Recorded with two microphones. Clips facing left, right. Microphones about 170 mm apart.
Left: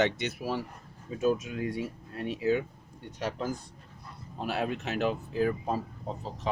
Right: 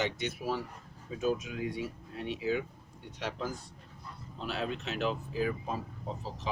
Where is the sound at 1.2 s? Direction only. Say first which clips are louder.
Left 4 dB; 45° left (ahead or behind).